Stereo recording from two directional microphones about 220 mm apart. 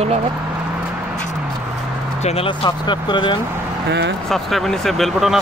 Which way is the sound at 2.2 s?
25° left (ahead or behind).